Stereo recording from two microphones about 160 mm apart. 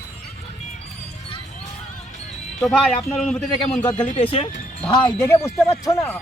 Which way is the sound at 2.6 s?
Centre (ahead or behind).